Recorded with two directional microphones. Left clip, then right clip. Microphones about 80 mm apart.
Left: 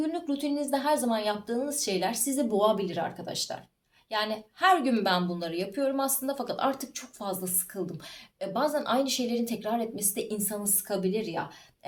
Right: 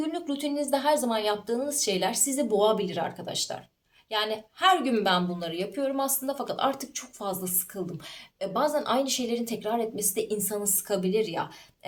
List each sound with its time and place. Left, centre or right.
0.0 s a woman's voice: right
4.8 s a woman's voice: right